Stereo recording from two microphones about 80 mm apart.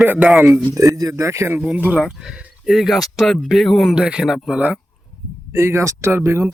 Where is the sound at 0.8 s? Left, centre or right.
Right.